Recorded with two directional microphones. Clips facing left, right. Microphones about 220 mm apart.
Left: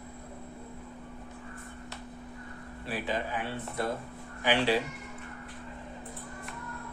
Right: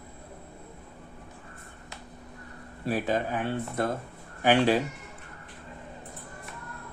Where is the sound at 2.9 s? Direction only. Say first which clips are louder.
Right 6 dB; 45° right (ahead or behind).